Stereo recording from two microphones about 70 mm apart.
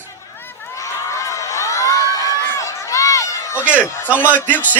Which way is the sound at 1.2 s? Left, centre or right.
Left.